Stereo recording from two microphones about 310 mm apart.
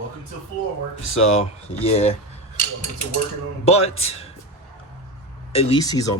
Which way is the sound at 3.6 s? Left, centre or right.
Centre.